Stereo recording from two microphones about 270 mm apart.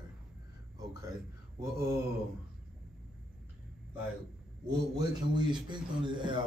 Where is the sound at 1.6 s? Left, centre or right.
Centre.